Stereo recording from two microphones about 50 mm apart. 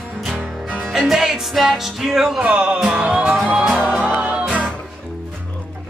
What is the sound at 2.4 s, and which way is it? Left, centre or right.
Speech, right.